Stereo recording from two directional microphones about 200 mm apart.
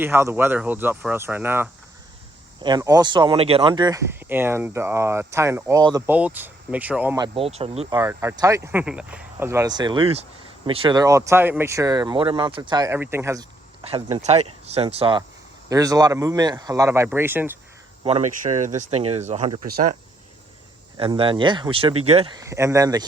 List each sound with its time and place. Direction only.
0.0 s speech: 10° right (ahead or behind)
6.1 s speech: 10° right (ahead or behind)
7.2 s speech: 30° right (ahead or behind)
7.9 s speech: 15° right (ahead or behind)
13.8 s speech: 30° right (ahead or behind)
15.7 s speech: 15° right (ahead or behind)
18.0 s speech: 35° right (ahead or behind)
21.0 s speech: 25° right (ahead or behind)
22.4 s speech: 15° right (ahead or behind)